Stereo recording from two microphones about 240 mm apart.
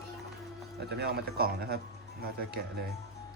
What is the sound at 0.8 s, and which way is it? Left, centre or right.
Speech, right.